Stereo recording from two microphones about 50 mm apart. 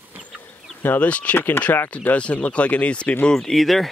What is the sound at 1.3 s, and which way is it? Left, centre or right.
Speech, left.